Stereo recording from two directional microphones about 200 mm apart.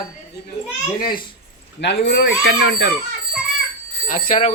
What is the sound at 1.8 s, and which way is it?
Speech, 60° left (ahead or behind).